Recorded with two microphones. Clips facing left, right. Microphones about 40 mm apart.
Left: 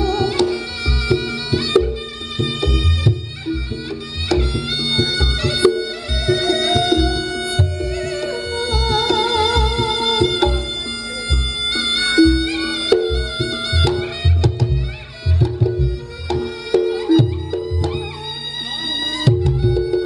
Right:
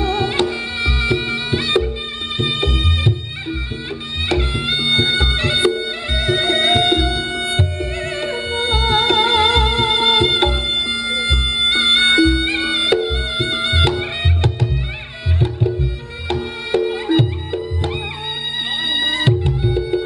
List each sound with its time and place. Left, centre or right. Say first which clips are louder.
0.0 s music: left 1 dB; right